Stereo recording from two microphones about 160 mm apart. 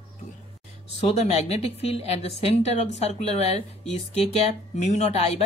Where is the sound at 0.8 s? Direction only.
40° left (ahead or behind).